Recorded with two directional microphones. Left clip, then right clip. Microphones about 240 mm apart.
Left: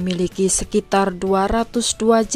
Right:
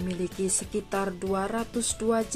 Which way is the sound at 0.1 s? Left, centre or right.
Left.